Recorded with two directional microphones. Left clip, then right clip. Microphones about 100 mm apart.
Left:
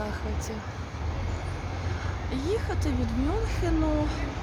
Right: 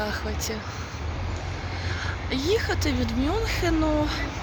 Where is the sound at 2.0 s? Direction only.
15° right (ahead or behind).